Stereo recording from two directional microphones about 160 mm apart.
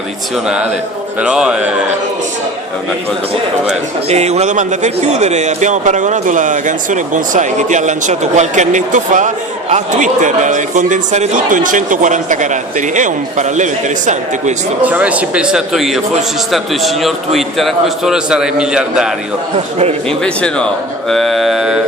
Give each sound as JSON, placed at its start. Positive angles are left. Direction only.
{"t": 1.2, "sound": "a man's voice", "side_deg": -5}
{"t": 4.1, "sound": "a man's voice", "side_deg": -45}
{"t": 14.8, "sound": "a man's voice", "side_deg": -10}
{"t": 20.1, "sound": "a man's voice", "side_deg": 5}